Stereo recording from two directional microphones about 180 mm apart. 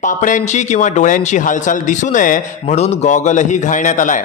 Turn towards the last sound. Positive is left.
turn(degrees=45)  # may be behind; listen again after turning